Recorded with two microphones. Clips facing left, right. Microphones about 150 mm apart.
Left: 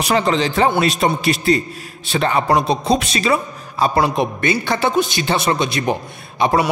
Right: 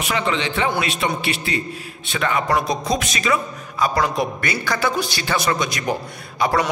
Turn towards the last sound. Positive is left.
turn(degrees=20)  # may be behind; listen again after turning